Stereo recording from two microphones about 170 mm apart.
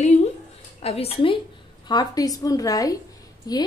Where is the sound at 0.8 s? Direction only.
35° left (ahead or behind).